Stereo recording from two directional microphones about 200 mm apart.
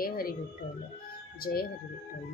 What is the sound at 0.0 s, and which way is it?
Speech, 45° left (ahead or behind).